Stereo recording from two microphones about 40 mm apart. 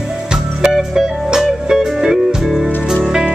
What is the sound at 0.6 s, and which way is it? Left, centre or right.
Music, centre.